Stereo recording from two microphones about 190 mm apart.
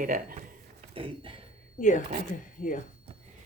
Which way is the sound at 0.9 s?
25° right (ahead or behind).